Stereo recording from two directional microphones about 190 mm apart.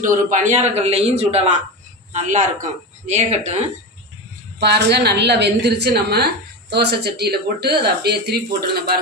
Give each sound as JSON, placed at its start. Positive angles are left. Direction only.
{"t": 0.0, "sound": "a man's voice", "side_deg": -45}
{"t": 4.6, "sound": "speech", "side_deg": -60}